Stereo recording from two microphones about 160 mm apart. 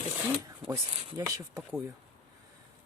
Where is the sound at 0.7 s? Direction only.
20° right (ahead or behind).